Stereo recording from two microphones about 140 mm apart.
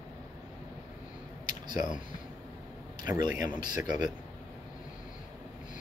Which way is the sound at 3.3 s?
70° left (ahead or behind).